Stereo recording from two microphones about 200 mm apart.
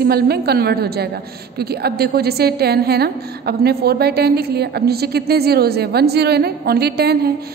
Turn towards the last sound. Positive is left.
turn(degrees=-55)  # may be behind; listen again after turning